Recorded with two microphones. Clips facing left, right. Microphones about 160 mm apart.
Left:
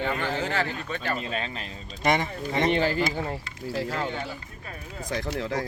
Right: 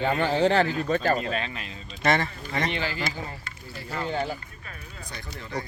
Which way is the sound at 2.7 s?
45° left (ahead or behind).